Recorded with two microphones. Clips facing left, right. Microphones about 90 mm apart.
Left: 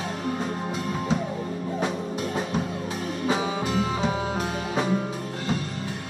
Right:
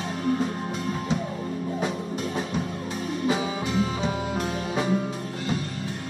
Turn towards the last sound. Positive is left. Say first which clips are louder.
# even
turn(degrees=5)  # may be behind; listen again after turning